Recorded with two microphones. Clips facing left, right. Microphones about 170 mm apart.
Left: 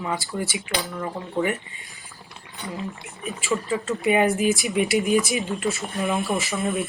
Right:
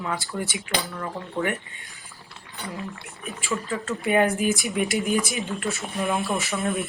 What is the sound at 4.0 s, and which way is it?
Speech, 5° left (ahead or behind).